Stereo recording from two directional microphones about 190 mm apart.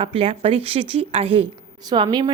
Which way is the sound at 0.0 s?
30° right (ahead or behind).